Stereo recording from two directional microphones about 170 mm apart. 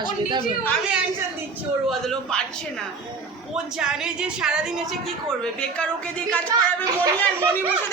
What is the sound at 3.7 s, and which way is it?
Speech, 5° right (ahead or behind).